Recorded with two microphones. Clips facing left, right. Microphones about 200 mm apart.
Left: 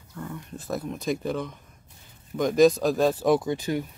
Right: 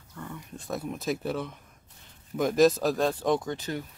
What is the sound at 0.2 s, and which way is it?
Speech, 5° left (ahead or behind).